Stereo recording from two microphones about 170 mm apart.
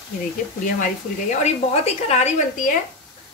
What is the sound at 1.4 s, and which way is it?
A woman's voice, 40° left (ahead or behind).